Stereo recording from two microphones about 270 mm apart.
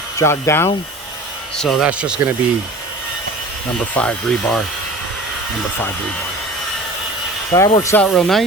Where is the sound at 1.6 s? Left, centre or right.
Centre.